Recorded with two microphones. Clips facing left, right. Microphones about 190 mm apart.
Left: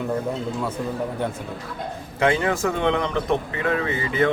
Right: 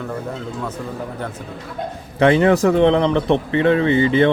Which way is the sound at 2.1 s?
30° right (ahead or behind).